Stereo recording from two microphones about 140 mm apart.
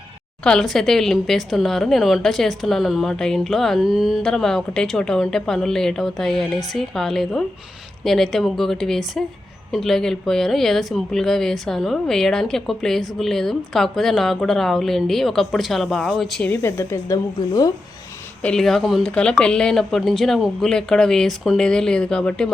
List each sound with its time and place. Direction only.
0.4 s a woman's voice: 5° left (ahead or behind)
16.5 s speech: 15° left (ahead or behind)
18.4 s a woman's voice: 5° left (ahead or behind)